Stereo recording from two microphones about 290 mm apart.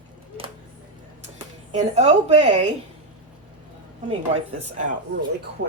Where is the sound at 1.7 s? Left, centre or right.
Right.